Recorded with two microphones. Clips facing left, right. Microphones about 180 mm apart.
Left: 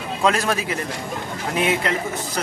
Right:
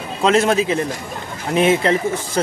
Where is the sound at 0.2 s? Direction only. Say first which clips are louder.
Right 6 dB; 25° right (ahead or behind).